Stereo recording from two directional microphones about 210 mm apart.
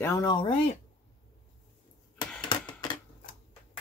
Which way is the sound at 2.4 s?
20° left (ahead or behind).